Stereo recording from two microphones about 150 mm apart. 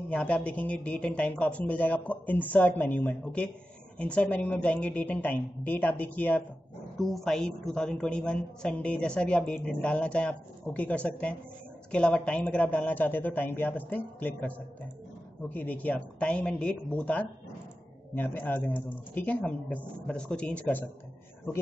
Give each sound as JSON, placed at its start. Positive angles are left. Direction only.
{"t": 0.1, "sound": "a woman's voice", "side_deg": 10}